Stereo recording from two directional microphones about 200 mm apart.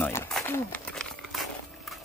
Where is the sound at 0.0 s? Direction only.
10° left (ahead or behind).